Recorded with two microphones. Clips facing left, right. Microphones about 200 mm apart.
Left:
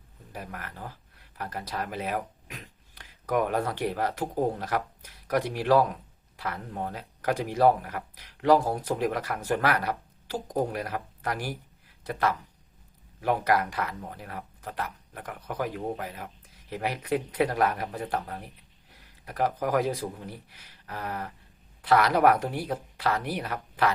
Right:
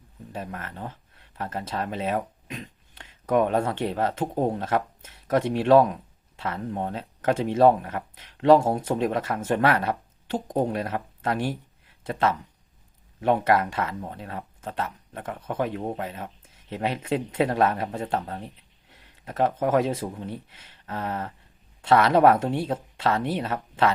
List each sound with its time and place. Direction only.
0.3 s speech: 25° right (ahead or behind)